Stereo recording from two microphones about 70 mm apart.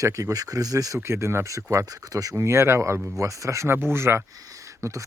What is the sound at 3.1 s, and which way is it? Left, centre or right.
Speech, right.